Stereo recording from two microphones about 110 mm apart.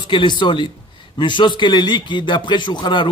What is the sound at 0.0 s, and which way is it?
A man's voice, 45° left (ahead or behind).